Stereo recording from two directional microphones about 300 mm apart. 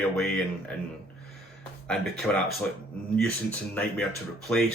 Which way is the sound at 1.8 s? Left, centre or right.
Centre.